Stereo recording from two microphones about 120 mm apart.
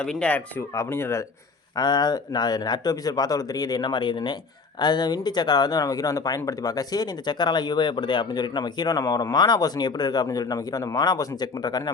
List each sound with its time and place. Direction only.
0.0 s speech: 5° left (ahead or behind)
1.7 s speech: 35° left (ahead or behind)